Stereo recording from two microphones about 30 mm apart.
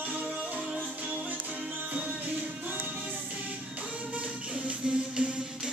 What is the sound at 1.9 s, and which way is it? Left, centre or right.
Music, right.